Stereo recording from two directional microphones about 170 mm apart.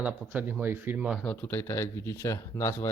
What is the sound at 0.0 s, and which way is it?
Speech, 10° right (ahead or behind).